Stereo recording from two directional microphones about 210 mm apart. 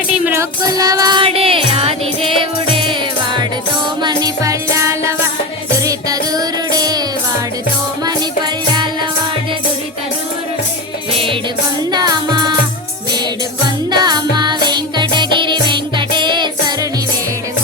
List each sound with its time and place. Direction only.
0.3 s music: 15° right (ahead or behind)
8.0 s music: 20° right (ahead or behind)
11.9 s music: 20° right (ahead or behind)
13.9 s music: 20° right (ahead or behind)